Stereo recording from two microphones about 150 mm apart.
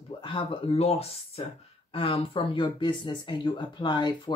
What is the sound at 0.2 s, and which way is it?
Speech, 35° left (ahead or behind).